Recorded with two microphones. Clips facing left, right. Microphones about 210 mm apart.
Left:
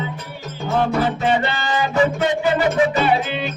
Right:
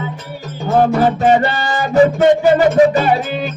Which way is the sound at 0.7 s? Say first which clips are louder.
Right 6 dB; 45° right (ahead or behind).